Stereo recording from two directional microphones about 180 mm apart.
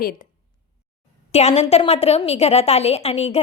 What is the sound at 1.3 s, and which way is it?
A woman's voice, 35° left (ahead or behind).